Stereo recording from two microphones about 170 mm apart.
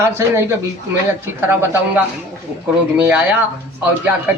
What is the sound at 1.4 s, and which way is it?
Speech, 10° right (ahead or behind).